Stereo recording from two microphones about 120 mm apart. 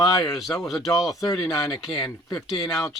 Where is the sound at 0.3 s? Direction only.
Centre (ahead or behind).